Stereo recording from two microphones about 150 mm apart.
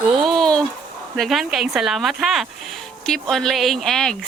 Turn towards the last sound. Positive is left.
turn(degrees=5)  # may be behind; listen again after turning